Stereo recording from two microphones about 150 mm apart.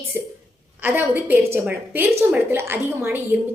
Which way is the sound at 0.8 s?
15° right (ahead or behind).